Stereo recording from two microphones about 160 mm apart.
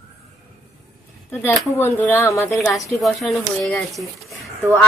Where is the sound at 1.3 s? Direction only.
10° left (ahead or behind).